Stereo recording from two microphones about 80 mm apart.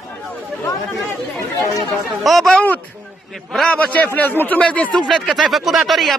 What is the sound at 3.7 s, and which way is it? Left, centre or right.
Speech, left.